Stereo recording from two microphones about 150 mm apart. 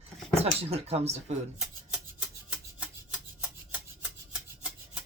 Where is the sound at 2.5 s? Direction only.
10° right (ahead or behind).